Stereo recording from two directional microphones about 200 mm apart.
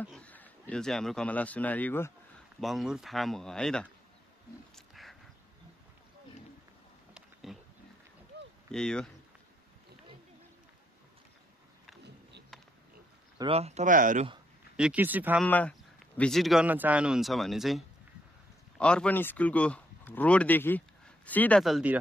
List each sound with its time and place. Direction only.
0.0 s speech: 5° left (ahead or behind)
2.6 s speech: centre (ahead or behind)
4.7 s a sound: centre (ahead or behind)
7.5 s a sound: centre (ahead or behind)
8.7 s speech: 5° left (ahead or behind)
12.0 s a sound: 60° right (ahead or behind)
13.4 s speech: 30° right (ahead or behind)
14.8 s speech: 5° right (ahead or behind)
15.4 s speech: 5° left (ahead or behind)